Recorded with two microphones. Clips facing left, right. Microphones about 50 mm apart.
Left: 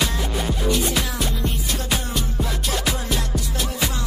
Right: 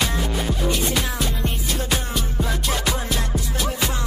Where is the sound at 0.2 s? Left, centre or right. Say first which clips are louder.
Right 1 dB; centre.